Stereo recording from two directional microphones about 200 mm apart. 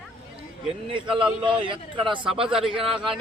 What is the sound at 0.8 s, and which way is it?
A man's voice, 25° right (ahead or behind).